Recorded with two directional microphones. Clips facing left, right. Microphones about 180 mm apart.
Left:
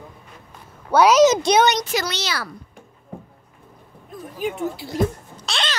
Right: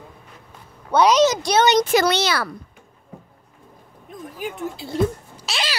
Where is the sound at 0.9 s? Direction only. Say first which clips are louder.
Left 2 dB; 5° left (ahead or behind).